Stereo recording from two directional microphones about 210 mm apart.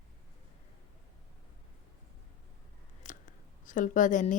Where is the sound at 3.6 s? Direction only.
40° left (ahead or behind).